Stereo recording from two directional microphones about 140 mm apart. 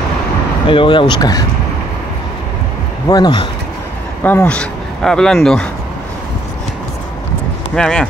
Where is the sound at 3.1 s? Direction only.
30° left (ahead or behind).